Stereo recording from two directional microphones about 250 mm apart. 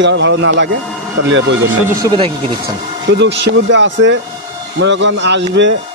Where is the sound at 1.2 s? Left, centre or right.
Right.